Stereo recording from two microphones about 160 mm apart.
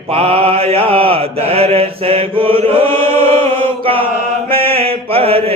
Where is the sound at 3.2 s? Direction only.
35° right (ahead or behind).